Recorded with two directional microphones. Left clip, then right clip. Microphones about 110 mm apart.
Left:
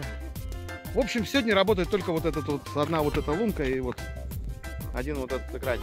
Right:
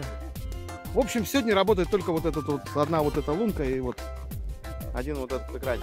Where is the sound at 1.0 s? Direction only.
30° right (ahead or behind).